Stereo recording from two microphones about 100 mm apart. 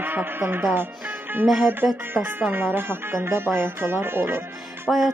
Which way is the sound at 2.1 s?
20° right (ahead or behind).